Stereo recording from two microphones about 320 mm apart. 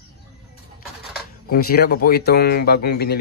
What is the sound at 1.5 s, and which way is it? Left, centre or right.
Speech, left.